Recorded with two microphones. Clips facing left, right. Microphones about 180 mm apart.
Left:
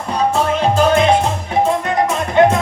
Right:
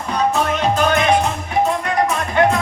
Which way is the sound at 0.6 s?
30° left (ahead or behind).